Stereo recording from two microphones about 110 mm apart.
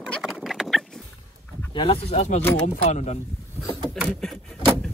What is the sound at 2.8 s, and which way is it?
Speech, 90° left.